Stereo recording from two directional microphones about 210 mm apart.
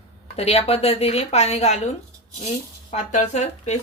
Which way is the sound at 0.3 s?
30° left (ahead or behind).